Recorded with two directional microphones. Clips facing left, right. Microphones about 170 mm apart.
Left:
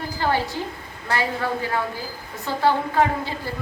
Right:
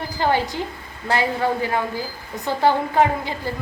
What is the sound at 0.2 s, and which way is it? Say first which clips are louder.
A woman's voice: right 3 dB; 15° right (ahead or behind).